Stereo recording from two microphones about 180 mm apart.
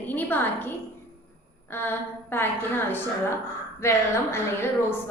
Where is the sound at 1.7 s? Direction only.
10° left (ahead or behind).